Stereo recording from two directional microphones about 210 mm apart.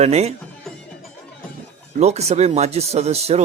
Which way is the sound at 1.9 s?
30° right (ahead or behind).